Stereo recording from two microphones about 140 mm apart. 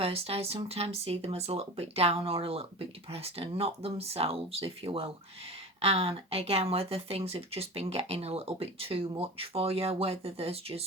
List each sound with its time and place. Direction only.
0.0 s speech: 45° right (ahead or behind)